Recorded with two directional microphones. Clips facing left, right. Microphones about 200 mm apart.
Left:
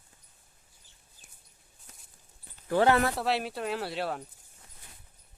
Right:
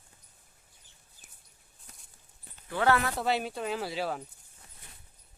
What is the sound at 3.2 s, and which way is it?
Speech, centre (ahead or behind).